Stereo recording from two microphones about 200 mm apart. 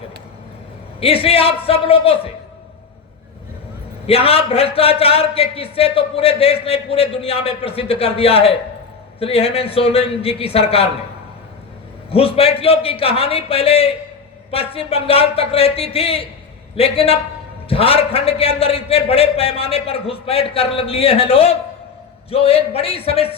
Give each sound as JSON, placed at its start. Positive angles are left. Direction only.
{"t": 0.9, "sound": "a man's voice", "side_deg": 30}
{"t": 4.0, "sound": "a man's voice", "side_deg": 30}
{"t": 12.1, "sound": "a man's voice", "side_deg": 30}